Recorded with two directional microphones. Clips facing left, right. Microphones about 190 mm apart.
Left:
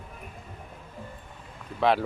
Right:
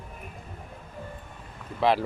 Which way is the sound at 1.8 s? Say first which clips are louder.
Even; centre (ahead or behind).